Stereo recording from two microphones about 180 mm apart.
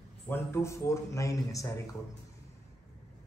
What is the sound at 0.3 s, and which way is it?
Speech, 15° left (ahead or behind).